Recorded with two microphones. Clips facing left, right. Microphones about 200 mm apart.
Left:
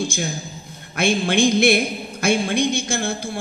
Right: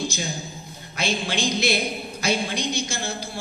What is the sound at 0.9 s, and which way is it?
Speech, 55° left (ahead or behind).